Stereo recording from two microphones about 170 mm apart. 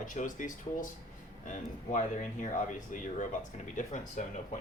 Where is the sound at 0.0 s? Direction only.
50° left (ahead or behind).